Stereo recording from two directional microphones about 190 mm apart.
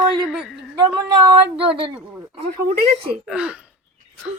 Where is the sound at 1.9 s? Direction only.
5° right (ahead or behind).